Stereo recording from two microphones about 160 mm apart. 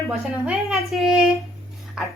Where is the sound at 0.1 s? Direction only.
Centre (ahead or behind).